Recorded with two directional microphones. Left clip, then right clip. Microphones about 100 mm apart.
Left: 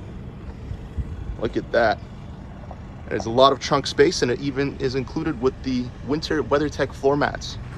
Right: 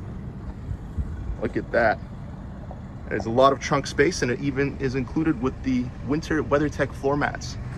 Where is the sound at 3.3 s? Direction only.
70° left (ahead or behind).